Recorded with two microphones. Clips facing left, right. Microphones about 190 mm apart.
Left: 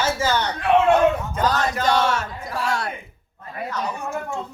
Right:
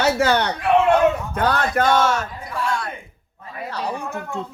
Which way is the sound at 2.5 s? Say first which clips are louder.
Even; 40° left (ahead or behind).